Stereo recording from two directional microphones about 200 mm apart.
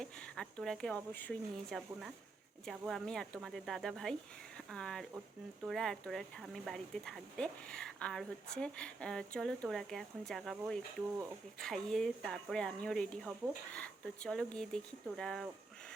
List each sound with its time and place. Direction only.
0.0 s a woman's voice: 5° left (ahead or behind)
11.6 s a woman's voice: 5° left (ahead or behind)